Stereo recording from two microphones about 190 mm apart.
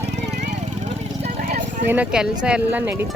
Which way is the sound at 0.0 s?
35° right (ahead or behind).